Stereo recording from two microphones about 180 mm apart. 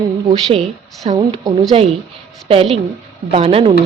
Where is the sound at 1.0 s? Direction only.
40° right (ahead or behind).